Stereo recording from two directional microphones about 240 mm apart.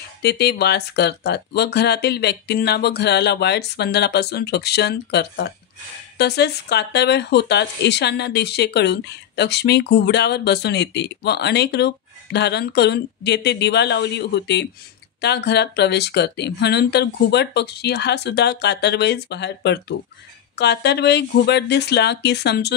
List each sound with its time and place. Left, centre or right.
0.2 s speech: left